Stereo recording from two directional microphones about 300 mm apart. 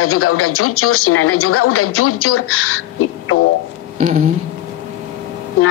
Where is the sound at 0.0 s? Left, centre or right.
Left.